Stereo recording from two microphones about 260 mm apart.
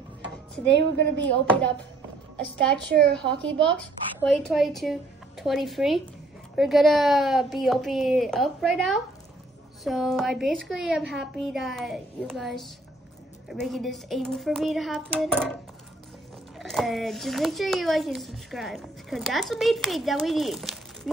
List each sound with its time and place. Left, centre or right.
0.2 s speech: right
1.2 s a child's voice: centre
3.2 s a child's voice: centre
16.5 s a child's voice: centre